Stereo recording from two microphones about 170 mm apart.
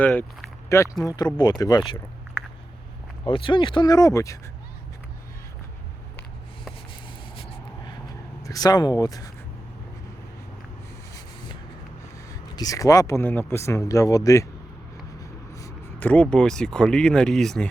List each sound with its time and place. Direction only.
0.0 s speech: 10° left (ahead or behind)
3.2 s speech: 30° left (ahead or behind)
7.3 s vehicle: 30° left (ahead or behind)
8.4 s speech: 20° left (ahead or behind)
12.3 s speech: 20° left (ahead or behind)
15.5 s speech: 15° left (ahead or behind)